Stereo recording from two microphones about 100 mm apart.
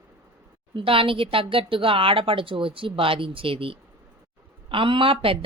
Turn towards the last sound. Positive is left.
turn(degrees=-65)  # may be behind; listen again after turning